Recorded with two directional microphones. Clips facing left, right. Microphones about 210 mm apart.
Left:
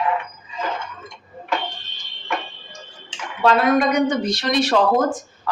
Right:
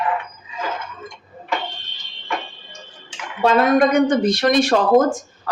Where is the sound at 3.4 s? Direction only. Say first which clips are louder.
Right 2 dB; 50° right (ahead or behind).